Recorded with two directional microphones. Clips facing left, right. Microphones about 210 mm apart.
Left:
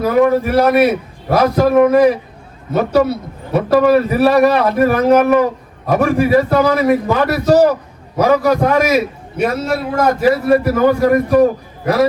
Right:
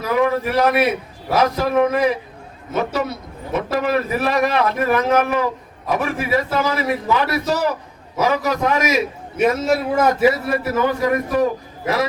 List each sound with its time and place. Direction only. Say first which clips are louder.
0.0 s a man's voice: left 6 dB; 45° left (ahead or behind)
9.6 s a man's voice: left 1 dB; 5° right (ahead or behind)
10.8 s a man's voice: left 7 dB; 40° left (ahead or behind)